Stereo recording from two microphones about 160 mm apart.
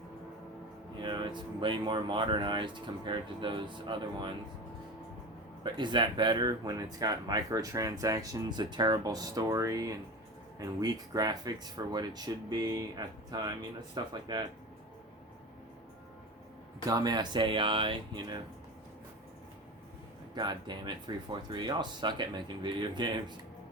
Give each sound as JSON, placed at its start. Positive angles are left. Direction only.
{"t": 1.0, "sound": "speech", "side_deg": -30}
{"t": 5.6, "sound": "speech", "side_deg": -30}
{"t": 16.8, "sound": "speech", "side_deg": -25}
{"t": 20.3, "sound": "speech", "side_deg": -30}